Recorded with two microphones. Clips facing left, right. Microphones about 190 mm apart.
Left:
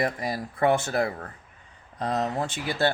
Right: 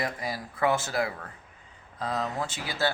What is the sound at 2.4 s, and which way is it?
Speech, 60° left (ahead or behind).